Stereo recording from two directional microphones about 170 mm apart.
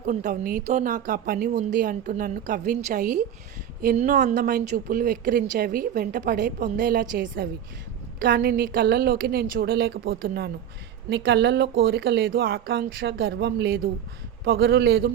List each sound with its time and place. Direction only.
0.0 s speech: 45° right (ahead or behind); by 10.5 s 65° right (ahead or behind)
11.1 s speech: 80° right